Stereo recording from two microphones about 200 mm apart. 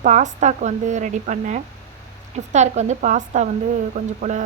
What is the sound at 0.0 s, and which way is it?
A woman's voice, 35° right (ahead or behind).